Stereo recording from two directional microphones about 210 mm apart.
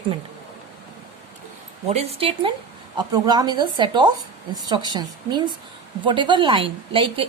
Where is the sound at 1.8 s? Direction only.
30° right (ahead or behind).